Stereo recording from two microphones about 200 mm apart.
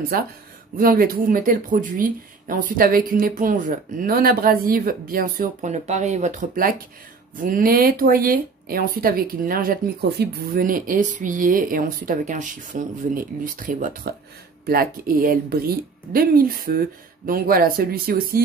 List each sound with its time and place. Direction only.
0.1 s speech: 45° right (ahead or behind)